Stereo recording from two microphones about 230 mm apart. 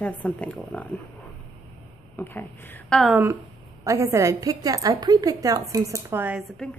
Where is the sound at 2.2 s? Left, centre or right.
Centre.